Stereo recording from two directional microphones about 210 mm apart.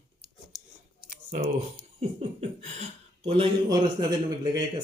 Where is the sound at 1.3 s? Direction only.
30° right (ahead or behind).